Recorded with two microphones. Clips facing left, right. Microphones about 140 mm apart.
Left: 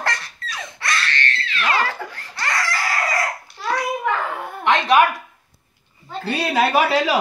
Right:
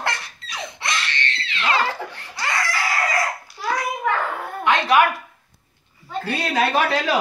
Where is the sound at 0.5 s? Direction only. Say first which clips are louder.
Left 1 dB; 15° right (ahead or behind).